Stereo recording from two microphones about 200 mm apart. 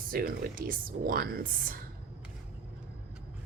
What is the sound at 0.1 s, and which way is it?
A woman's voice, 45° right (ahead or behind).